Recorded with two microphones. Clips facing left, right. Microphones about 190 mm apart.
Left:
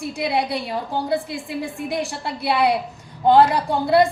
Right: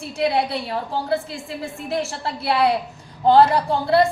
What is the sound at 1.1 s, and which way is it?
Speech, 15° left (ahead or behind).